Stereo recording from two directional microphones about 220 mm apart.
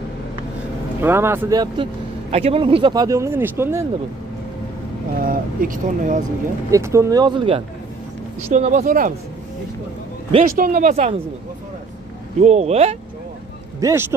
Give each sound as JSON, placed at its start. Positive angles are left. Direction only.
{"t": 1.0, "sound": "speech", "side_deg": -10}
{"t": 5.2, "sound": "speech", "side_deg": -40}
{"t": 6.7, "sound": "speech", "side_deg": -15}
{"t": 10.4, "sound": "speech", "side_deg": -40}
{"t": 12.4, "sound": "speech", "side_deg": -30}
{"t": 13.7, "sound": "speech", "side_deg": -15}